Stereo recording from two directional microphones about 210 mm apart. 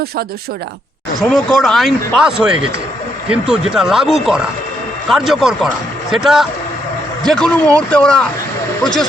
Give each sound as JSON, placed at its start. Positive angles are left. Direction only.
{"t": 1.2, "sound": "a man's voice", "side_deg": 5}